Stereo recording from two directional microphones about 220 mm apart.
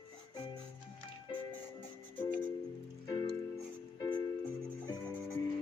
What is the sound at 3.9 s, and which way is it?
Music, 15° left (ahead or behind).